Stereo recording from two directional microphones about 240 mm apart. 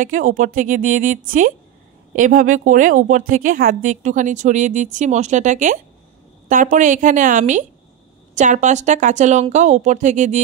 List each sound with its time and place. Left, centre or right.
0.0 s a woman's voice: right